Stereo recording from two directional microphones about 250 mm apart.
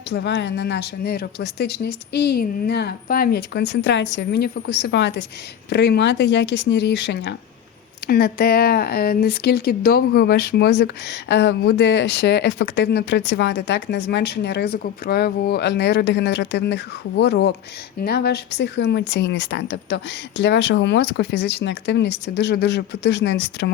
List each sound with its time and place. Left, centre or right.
0.1 s speech: left